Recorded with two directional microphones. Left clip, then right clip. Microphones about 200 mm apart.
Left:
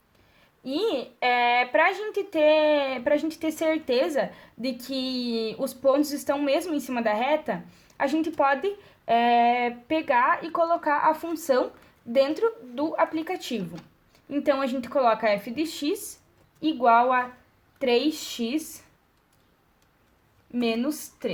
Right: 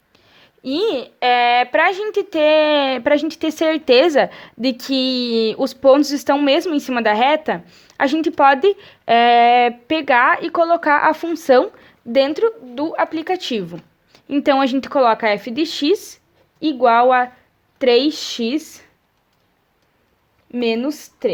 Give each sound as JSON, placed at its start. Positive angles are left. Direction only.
{"t": 0.3, "sound": "speech", "side_deg": -50}
{"t": 20.5, "sound": "speech", "side_deg": -40}